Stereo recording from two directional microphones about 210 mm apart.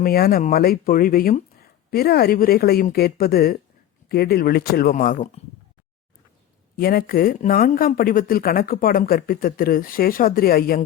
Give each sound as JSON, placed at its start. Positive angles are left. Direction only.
{"t": 0.0, "sound": "speech", "side_deg": 45}
{"t": 6.7, "sound": "speech", "side_deg": 45}